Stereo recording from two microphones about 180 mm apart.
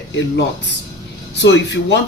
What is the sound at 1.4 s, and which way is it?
Speech, 75° left (ahead or behind).